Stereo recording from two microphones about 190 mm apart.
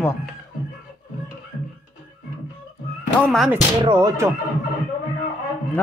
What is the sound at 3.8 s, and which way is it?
Speech, 20° right (ahead or behind).